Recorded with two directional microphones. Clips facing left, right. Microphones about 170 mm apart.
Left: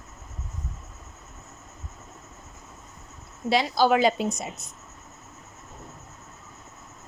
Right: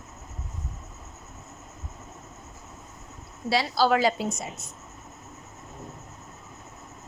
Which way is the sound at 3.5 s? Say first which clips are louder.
Left 2 dB; 20° left (ahead or behind).